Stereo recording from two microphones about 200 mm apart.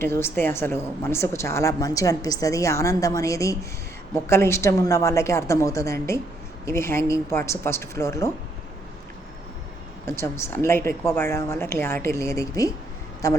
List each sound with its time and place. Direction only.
0.0 s a woman's voice: 10° left (ahead or behind)
10.1 s a woman's voice: 10° left (ahead or behind)